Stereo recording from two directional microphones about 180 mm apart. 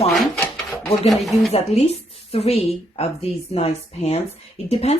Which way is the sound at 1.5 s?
35° left (ahead or behind).